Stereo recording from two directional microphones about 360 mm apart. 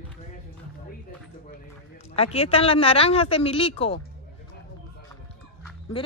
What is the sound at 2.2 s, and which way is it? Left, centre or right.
Speech, centre.